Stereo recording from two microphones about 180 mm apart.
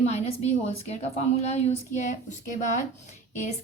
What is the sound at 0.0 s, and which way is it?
A woman's voice, 35° left (ahead or behind).